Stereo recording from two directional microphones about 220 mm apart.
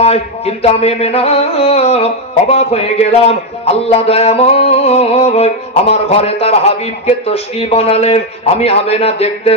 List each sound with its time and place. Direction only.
0.0 s carnatic music: 25° left (ahead or behind)